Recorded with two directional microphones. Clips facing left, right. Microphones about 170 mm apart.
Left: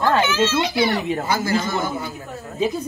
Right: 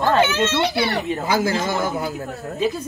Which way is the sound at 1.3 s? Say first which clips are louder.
Right 3 dB; 90° right.